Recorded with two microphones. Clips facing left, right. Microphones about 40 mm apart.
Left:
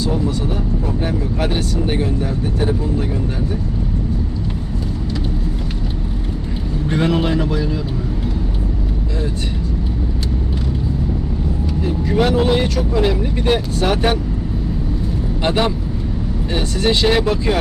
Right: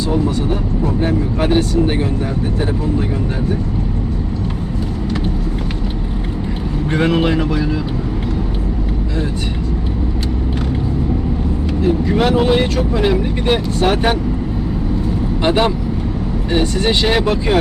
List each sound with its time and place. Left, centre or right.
0.9 s speech: centre
6.9 s speech: right
11.9 s speech: centre
15.4 s speech: centre